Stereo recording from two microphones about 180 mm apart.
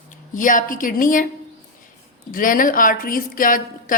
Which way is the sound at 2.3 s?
50° left (ahead or behind).